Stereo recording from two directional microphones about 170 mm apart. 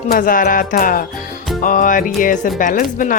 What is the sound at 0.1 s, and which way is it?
Speech, 55° left (ahead or behind).